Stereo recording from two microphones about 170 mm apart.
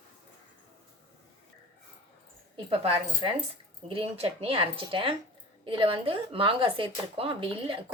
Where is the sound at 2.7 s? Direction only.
35° right (ahead or behind).